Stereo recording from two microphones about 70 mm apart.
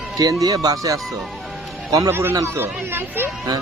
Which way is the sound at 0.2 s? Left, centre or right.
Right.